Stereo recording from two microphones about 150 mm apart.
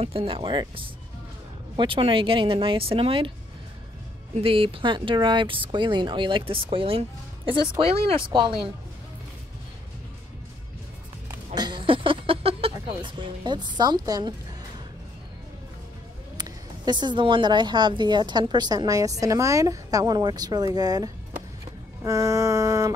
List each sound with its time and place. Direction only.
0.0 s speech: 40° right (ahead or behind)
4.4 s speech: 35° right (ahead or behind)
11.5 s a sound: 30° right (ahead or behind)
13.0 s a woman's voice: 35° right (ahead or behind)
16.3 s a woman's voice: 25° right (ahead or behind)